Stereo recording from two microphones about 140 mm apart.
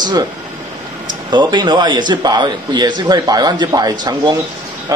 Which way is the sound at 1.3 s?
30° right (ahead or behind).